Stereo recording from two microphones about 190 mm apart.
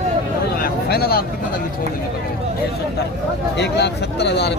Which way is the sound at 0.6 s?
55° left (ahead or behind).